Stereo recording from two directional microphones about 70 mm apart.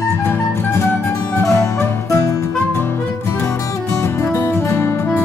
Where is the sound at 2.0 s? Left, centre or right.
Left.